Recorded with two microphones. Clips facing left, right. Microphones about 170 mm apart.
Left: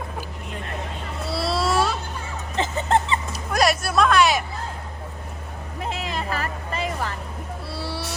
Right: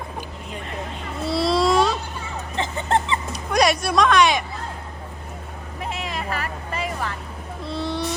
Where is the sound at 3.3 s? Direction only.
Centre (ahead or behind).